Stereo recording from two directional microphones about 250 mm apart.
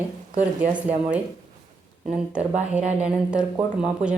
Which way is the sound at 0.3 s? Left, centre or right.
Right.